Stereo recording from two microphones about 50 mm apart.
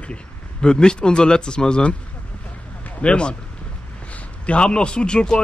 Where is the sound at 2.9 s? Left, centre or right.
Left.